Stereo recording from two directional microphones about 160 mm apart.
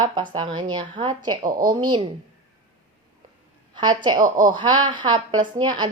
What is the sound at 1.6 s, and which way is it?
Speech, 25° right (ahead or behind).